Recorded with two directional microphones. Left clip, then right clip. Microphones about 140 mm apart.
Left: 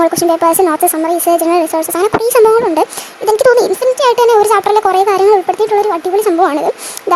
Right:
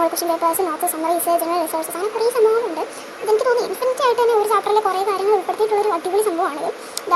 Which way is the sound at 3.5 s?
90° left.